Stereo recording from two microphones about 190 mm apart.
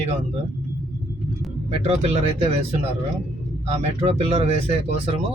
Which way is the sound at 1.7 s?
35° right (ahead or behind).